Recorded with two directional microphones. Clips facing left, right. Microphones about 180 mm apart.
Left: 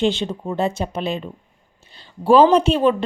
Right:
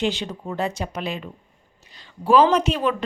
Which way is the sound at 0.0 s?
25° left (ahead or behind).